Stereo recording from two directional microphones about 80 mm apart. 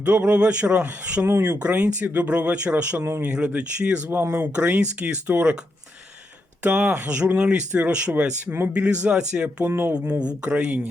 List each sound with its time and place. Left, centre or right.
0.0 s speech: centre
3.3 s speech: centre
4.2 s speech: right
4.5 s speech: centre
6.6 s speech: centre
9.6 s speech: right
10.2 s speech: centre